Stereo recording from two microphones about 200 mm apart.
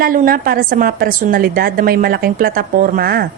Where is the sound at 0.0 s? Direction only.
45° right (ahead or behind).